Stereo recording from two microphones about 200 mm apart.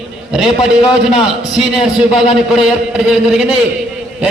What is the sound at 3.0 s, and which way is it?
Speech, centre (ahead or behind).